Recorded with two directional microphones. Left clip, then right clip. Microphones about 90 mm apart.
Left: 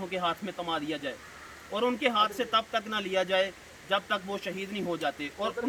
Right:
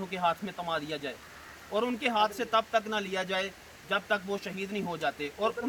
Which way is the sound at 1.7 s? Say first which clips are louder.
Left 2 dB; 45° right (ahead or behind).